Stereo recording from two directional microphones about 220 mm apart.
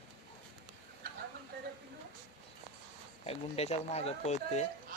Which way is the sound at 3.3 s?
30° left (ahead or behind).